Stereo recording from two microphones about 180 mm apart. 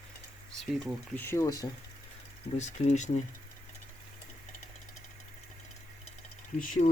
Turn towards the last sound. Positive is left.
turn(degrees=45)  # may be behind; listen again after turning